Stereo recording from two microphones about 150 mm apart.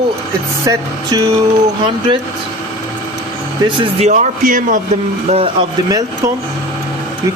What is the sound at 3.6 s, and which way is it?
Speech, 35° right (ahead or behind).